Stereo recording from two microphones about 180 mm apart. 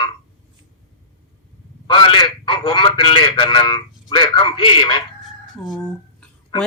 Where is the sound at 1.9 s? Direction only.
25° left (ahead or behind).